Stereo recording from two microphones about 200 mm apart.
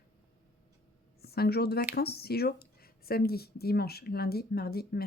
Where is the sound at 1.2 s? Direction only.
50° left (ahead or behind).